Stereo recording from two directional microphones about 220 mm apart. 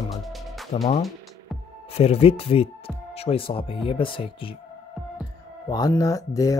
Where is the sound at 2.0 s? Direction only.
25° left (ahead or behind).